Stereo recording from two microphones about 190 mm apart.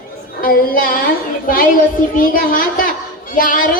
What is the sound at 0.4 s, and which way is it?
Music, 50° left (ahead or behind).